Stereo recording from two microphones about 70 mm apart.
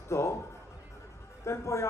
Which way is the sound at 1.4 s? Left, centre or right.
Left.